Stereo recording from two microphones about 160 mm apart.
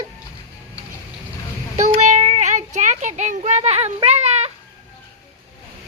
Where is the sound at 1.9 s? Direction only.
45° right (ahead or behind).